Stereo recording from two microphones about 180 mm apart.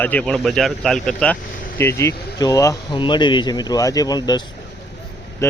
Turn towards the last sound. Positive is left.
turn(degrees=20)  # may be behind; listen again after turning